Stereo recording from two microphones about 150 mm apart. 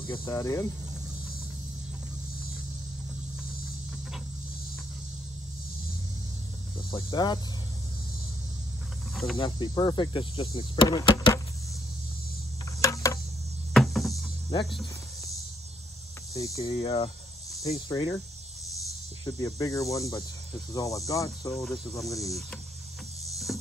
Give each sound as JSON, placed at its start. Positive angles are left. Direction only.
{"t": 0.1, "sound": "speech", "side_deg": 25}
{"t": 6.9, "sound": "speech", "side_deg": 30}
{"t": 9.1, "sound": "cricket", "side_deg": 0}
{"t": 9.4, "sound": "speech", "side_deg": 30}
{"t": 12.8, "sound": "cricket", "side_deg": 20}
{"t": 13.7, "sound": "a sound", "side_deg": 0}
{"t": 16.3, "sound": "speech", "side_deg": 20}
{"t": 16.6, "sound": "speech", "side_deg": 40}
{"t": 19.2, "sound": "speech", "side_deg": 25}
{"t": 21.6, "sound": "speech", "side_deg": 0}
{"t": 22.1, "sound": "speech", "side_deg": 20}
{"t": 23.5, "sound": "music", "side_deg": 0}